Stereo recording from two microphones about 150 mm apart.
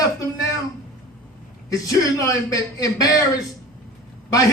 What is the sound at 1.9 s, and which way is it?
A man's voice, 25° left (ahead or behind).